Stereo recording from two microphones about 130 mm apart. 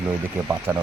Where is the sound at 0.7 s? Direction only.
15° right (ahead or behind).